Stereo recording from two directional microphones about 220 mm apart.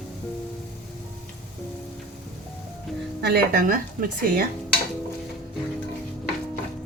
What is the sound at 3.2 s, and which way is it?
A woman's voice, 45° right (ahead or behind).